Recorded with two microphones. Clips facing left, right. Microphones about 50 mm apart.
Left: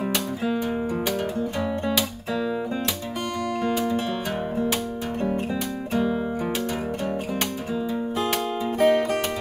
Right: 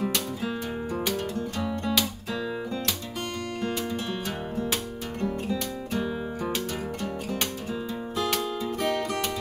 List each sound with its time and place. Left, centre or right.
1.6 s music: centre
3.6 s music: centre
8.2 s music: left